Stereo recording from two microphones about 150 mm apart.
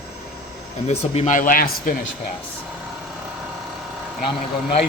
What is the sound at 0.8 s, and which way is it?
Speech, 45° left (ahead or behind).